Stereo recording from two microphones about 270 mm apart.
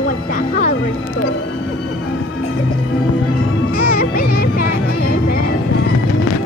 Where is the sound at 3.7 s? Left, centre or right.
Left.